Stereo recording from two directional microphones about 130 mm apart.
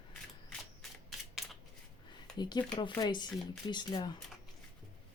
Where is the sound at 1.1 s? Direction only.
Centre (ahead or behind).